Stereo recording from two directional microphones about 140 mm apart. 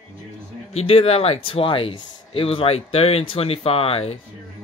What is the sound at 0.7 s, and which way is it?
Speech, 45° left (ahead or behind).